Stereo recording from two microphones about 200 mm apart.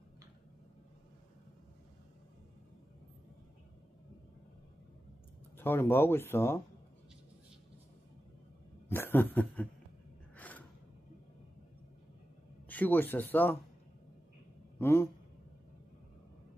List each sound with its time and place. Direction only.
5.5 s speech: 10° left (ahead or behind)
8.9 s a sound: 10° left (ahead or behind)
10.3 s gasp: 10° left (ahead or behind)
12.6 s speech: 10° left (ahead or behind)
14.8 s speech: 10° left (ahead or behind)